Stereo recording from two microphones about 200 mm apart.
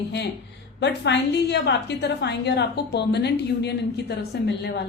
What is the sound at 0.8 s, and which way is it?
A woman's voice, 60° left (ahead or behind).